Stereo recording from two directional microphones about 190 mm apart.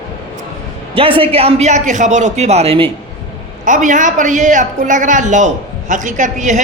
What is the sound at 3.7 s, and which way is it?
A man's voice, 40° right (ahead or behind).